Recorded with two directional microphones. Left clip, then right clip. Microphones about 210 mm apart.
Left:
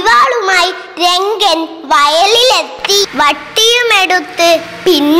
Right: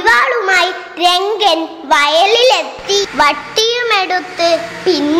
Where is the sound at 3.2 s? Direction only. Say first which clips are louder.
Left 2 dB; 30° left (ahead or behind).